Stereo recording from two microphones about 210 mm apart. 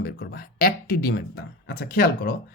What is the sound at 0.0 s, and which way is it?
Speech, 50° left (ahead or behind).